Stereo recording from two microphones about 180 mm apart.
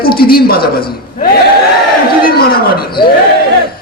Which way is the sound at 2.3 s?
55° left (ahead or behind).